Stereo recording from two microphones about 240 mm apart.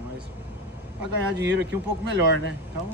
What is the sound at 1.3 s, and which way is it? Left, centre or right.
Speech, right.